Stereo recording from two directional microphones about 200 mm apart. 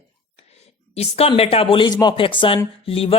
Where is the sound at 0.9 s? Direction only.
30° left (ahead or behind).